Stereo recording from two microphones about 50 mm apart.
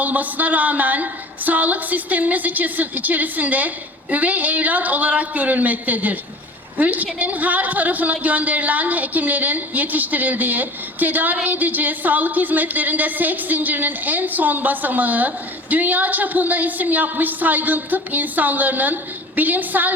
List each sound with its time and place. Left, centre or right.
0.0 s a woman's voice: right